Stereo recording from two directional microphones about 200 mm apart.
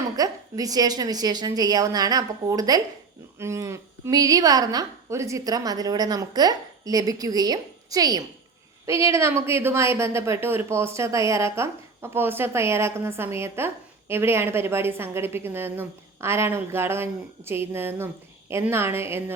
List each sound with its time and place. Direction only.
0.2 s a woman's voice: 20° right (ahead or behind)